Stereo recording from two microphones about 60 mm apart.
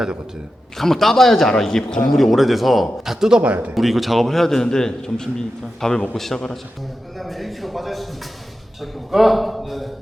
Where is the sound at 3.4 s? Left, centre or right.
Right.